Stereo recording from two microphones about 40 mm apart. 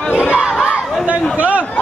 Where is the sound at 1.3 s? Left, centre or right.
Right.